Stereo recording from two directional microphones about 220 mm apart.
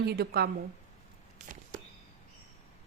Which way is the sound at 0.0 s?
45° right (ahead or behind).